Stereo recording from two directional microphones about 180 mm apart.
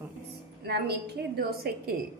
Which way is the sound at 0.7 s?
65° right (ahead or behind).